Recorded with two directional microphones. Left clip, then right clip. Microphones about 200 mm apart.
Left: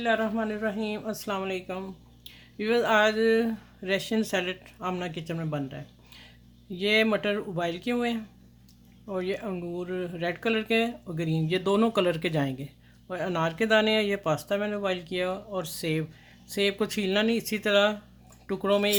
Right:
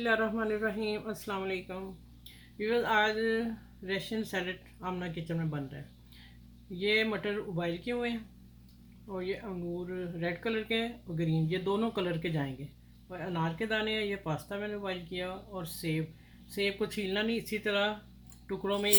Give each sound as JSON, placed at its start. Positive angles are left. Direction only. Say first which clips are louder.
{"t": 0.0, "sound": "a woman's voice", "louder": "left 3 dB", "side_deg": 25}